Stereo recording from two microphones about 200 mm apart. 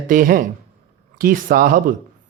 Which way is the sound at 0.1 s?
45° right (ahead or behind).